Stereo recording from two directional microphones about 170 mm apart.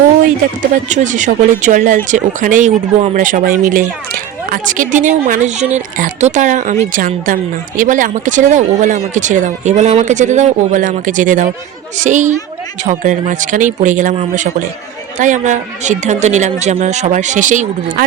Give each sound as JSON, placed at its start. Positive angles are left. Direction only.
{"t": 0.9, "sound": "speech", "side_deg": -45}